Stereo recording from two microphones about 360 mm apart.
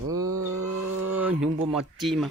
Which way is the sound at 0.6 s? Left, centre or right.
Centre.